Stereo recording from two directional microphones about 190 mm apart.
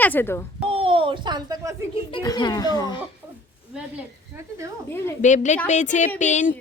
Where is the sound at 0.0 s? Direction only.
10° left (ahead or behind).